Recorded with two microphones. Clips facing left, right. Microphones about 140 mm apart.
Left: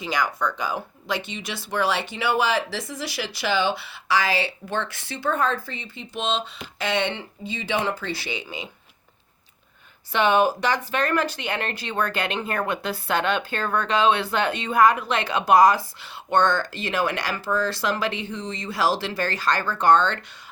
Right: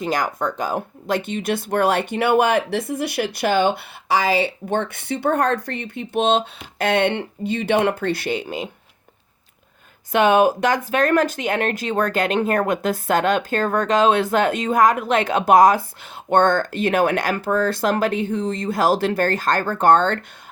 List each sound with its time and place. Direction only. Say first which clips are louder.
0.0 s speech: right 3 dB; 45° right (ahead or behind)
10.1 s speech: right 4 dB; 45° right (ahead or behind)